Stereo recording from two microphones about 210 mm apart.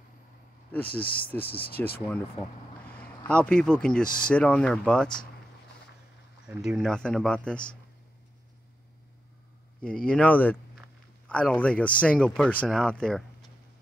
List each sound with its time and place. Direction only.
0.8 s speech: 45° left (ahead or behind)
3.3 s speech: 5° left (ahead or behind)
6.4 s speech: 5° right (ahead or behind)
9.8 s speech: 5° left (ahead or behind)